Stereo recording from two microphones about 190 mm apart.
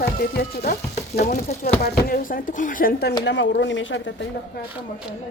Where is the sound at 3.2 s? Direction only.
70° left (ahead or behind).